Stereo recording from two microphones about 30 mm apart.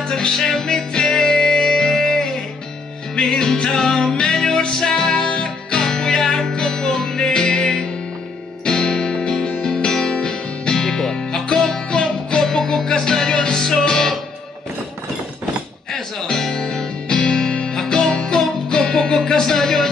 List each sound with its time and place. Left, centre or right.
0.1 s music: centre
4.1 s music: left
5.3 s music: left
15.9 s music: centre